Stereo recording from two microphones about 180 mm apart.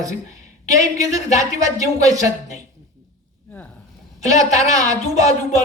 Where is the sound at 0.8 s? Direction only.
20° right (ahead or behind).